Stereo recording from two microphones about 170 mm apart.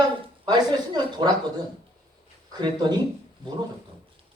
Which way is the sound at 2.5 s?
25° right (ahead or behind).